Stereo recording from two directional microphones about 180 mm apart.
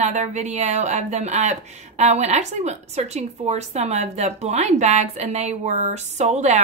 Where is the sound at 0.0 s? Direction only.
40° right (ahead or behind).